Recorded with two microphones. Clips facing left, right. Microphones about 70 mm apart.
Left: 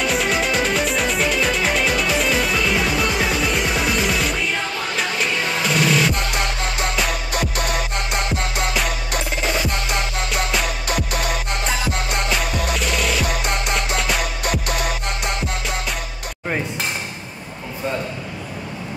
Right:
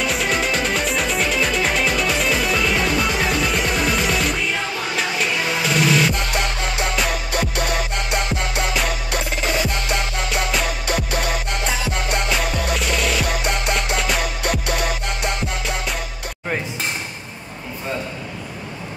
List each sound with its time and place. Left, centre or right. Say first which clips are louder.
0.0 s music: left 1 dB; centre
10.3 s music: right 1 dB; centre